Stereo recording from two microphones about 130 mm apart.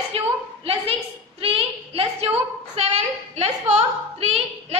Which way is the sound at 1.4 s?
45° right (ahead or behind).